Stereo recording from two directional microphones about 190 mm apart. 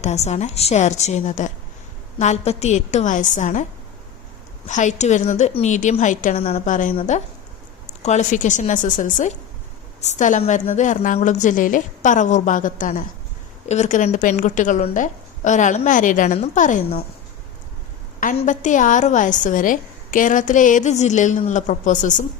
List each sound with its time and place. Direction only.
0.0 s a woman's voice: 35° left (ahead or behind)
18.2 s a woman's voice: 40° left (ahead or behind)